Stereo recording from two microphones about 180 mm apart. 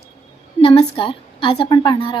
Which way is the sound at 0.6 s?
30° left (ahead or behind).